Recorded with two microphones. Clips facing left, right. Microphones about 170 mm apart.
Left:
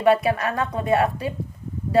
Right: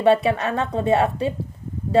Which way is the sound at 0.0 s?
25° right (ahead or behind).